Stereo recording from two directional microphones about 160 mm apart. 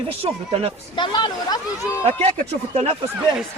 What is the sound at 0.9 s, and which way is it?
Speech, 30° left (ahead or behind).